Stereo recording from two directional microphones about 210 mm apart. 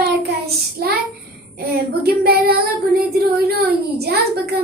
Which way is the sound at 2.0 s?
45° right (ahead or behind).